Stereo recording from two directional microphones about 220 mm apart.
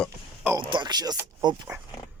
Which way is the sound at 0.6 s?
20° right (ahead or behind).